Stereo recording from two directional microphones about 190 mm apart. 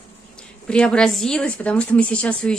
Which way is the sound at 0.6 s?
5° left (ahead or behind).